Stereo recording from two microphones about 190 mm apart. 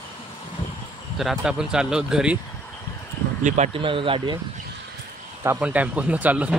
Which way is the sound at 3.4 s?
35° right (ahead or behind).